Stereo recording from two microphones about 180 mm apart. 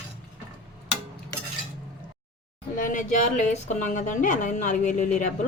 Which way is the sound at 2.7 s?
45° left (ahead or behind).